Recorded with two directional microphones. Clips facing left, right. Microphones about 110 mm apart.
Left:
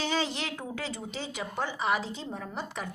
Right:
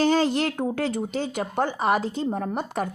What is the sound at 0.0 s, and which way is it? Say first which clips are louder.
Speech: right 10 dB; 50° right (ahead or behind).